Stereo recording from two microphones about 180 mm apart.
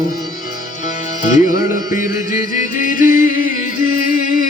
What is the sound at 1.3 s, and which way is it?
Music, 45° left (ahead or behind).